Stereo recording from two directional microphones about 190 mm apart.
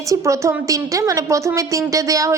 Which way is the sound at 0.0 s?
15° right (ahead or behind).